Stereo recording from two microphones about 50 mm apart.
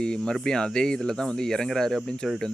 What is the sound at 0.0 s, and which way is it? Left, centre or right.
Speech, centre.